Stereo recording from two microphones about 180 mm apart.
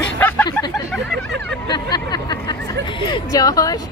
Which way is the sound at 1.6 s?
25° left (ahead or behind).